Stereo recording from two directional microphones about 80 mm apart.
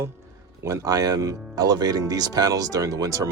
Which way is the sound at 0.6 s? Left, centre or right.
Right.